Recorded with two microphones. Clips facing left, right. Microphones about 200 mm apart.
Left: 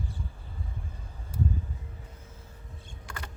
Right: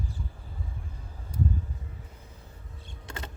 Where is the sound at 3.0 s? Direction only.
25° right (ahead or behind).